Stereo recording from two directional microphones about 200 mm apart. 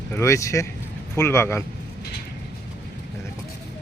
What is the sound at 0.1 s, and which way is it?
Speech, 15° left (ahead or behind).